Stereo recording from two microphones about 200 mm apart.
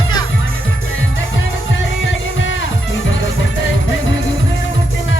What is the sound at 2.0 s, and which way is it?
Music, 70° left (ahead or behind).